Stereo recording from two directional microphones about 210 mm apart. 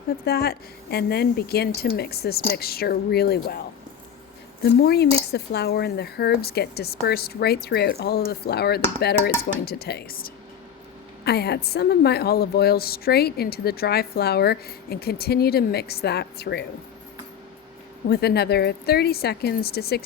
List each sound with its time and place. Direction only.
0.3 s speech: 50° left (ahead or behind)
4.6 s speech: 50° left (ahead or behind)
18.1 s speech: 50° left (ahead or behind)